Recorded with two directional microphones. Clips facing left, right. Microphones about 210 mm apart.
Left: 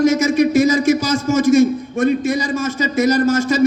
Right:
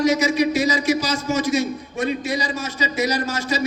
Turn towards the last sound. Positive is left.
turn(degrees=50)  # may be behind; listen again after turning